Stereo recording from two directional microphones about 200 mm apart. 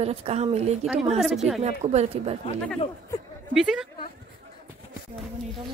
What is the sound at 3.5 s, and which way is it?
Speech, 5° right (ahead or behind).